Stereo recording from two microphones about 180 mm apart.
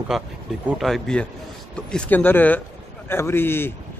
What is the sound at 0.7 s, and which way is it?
Speech, centre (ahead or behind).